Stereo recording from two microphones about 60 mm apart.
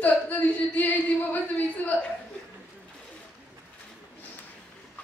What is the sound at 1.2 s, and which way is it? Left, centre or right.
Speech, left.